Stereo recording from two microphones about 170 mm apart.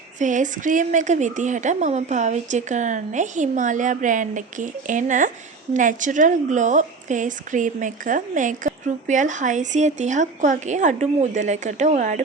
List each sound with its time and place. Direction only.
0.2 s a woman's voice: 50° right (ahead or behind)